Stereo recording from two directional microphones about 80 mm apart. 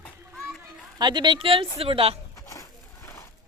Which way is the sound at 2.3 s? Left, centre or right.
Left.